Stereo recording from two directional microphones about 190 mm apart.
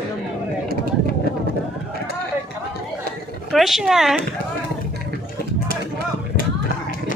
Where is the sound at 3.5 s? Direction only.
Centre (ahead or behind).